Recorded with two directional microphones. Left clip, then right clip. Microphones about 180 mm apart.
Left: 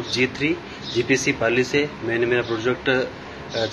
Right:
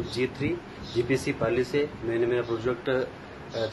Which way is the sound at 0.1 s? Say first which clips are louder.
Left 9 dB; 10° right (ahead or behind).